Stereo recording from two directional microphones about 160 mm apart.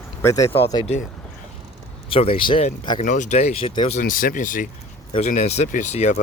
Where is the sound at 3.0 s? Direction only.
50° left (ahead or behind).